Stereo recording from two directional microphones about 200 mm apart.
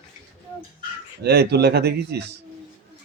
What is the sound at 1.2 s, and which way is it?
Speech, 55° right (ahead or behind).